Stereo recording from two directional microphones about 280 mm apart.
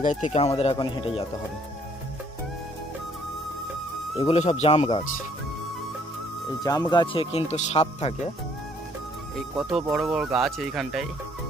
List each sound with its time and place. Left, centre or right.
0.3 s speech: left
4.2 s speech: left
6.6 s speech: centre
9.3 s speech: centre